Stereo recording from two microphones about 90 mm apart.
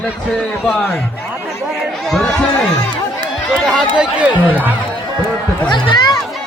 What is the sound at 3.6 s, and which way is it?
Speech, 5° left (ahead or behind).